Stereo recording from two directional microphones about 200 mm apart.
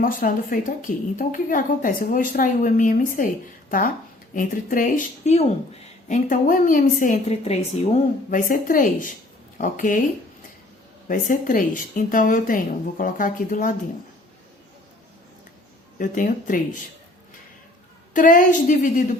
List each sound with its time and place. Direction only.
0.0 s a woman's voice: 45° left (ahead or behind)
11.1 s a woman's voice: 40° left (ahead or behind)
16.0 s a woman's voice: 40° left (ahead or behind)
18.1 s a woman's voice: 40° left (ahead or behind)